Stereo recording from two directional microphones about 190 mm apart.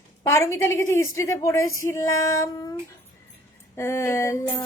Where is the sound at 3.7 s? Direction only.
15° left (ahead or behind).